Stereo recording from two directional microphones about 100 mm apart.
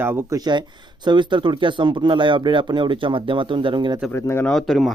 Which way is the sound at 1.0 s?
50° right (ahead or behind).